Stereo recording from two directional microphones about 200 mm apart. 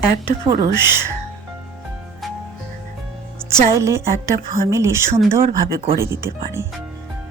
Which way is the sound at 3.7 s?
15° right (ahead or behind).